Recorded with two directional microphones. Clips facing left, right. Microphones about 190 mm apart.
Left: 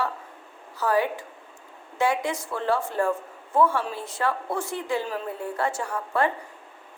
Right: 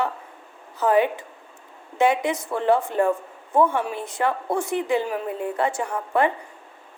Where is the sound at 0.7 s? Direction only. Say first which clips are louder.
Right 4 dB; 20° right (ahead or behind).